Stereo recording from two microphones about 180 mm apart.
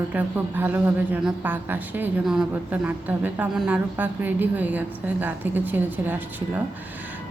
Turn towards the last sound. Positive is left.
turn(degrees=-10)  # may be behind; listen again after turning